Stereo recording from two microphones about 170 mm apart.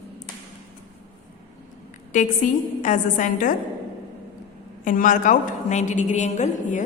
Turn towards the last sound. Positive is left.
turn(degrees=45)  # may be behind; listen again after turning